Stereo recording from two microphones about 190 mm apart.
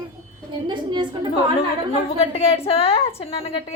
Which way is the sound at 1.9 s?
30° left (ahead or behind).